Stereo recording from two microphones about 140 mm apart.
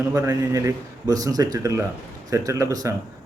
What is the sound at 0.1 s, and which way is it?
Speech, 25° right (ahead or behind).